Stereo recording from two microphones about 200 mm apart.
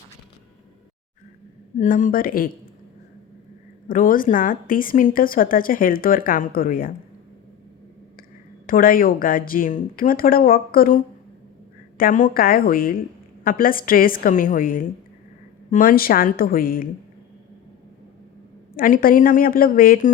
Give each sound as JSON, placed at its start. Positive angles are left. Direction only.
{"t": 1.8, "sound": "a woman's voice", "side_deg": 40}
{"t": 3.8, "sound": "a woman's voice", "side_deg": 45}
{"t": 8.6, "sound": "a woman's voice", "side_deg": 45}
{"t": 18.8, "sound": "a woman's voice", "side_deg": 45}